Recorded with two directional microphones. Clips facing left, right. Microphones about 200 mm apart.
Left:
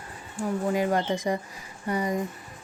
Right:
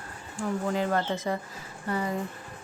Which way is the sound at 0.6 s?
15° left (ahead or behind).